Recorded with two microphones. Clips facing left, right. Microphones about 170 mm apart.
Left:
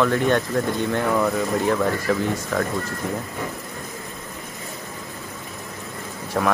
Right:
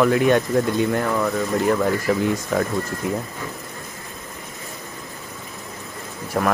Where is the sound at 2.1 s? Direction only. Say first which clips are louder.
Right 2 dB; 15° right (ahead or behind).